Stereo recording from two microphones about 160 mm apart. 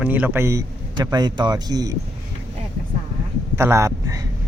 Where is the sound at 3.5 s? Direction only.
15° right (ahead or behind).